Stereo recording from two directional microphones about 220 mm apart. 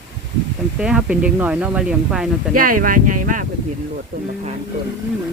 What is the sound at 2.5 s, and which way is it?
Speech, 40° right (ahead or behind).